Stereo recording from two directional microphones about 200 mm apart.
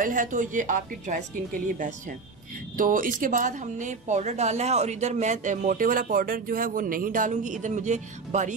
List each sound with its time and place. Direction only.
0.0 s a woman's voice: 40° right (ahead or behind)